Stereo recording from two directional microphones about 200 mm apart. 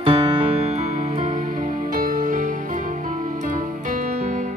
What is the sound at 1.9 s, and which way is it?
Music, 45° right (ahead or behind).